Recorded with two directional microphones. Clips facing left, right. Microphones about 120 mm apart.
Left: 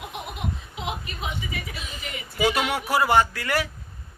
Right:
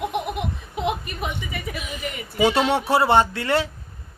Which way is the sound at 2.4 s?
30° right (ahead or behind).